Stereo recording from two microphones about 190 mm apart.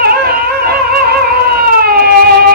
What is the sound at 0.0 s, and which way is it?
Music, 50° right (ahead or behind).